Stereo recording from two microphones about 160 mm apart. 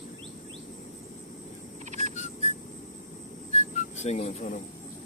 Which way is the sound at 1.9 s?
45° right (ahead or behind).